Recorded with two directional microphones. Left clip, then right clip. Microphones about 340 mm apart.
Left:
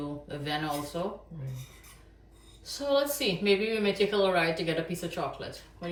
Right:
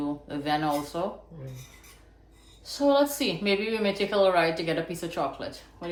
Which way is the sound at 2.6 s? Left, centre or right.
Centre.